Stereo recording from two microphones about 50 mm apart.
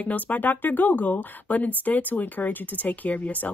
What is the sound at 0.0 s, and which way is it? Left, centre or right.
Speech, left.